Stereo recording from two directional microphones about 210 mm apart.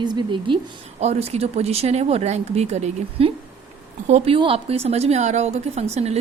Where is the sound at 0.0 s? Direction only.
20° right (ahead or behind).